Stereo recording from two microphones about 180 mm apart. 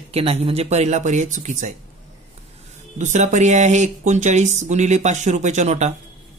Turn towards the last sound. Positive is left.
turn(degrees=-40)  # may be behind; listen again after turning